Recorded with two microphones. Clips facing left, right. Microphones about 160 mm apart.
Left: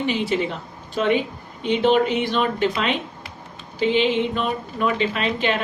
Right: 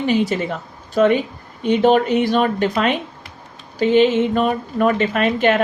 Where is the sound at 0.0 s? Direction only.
45° right (ahead or behind).